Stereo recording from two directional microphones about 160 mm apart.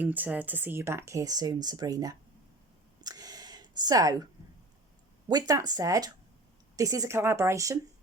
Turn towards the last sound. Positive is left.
turn(degrees=-20)  # may be behind; listen again after turning